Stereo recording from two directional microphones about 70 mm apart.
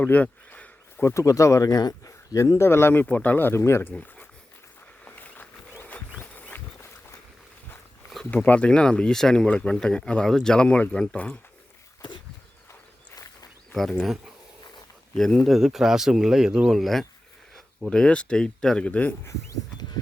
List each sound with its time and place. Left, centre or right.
0.0 s a sound: left
1.0 s speech: left
5.0 s a sound: left
8.4 s speech: centre
13.9 s speech: centre
15.1 s speech: centre
15.4 s speech: centre
17.9 s speech: centre
18.9 s speech: left